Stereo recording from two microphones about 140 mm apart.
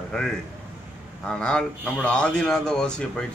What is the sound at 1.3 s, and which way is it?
A man's voice, 5° left (ahead or behind).